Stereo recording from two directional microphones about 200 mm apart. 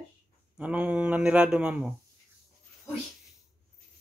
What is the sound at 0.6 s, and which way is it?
Speech, 5° right (ahead or behind).